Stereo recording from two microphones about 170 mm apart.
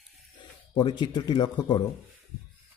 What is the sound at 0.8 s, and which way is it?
Speech, 25° left (ahead or behind).